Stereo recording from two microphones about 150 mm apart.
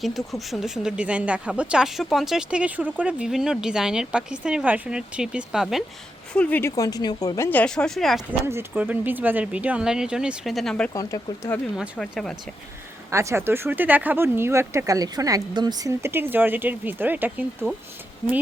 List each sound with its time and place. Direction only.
0.0 s speech: centre (ahead or behind)
6.3 s a woman's voice: 10° left (ahead or behind)
8.3 s speech: 15° right (ahead or behind); by 10.9 s 5° left (ahead or behind)
10.9 s speech: 20° left (ahead or behind)
11.8 s speech: centre (ahead or behind)
13.1 s speech: 20° right (ahead or behind)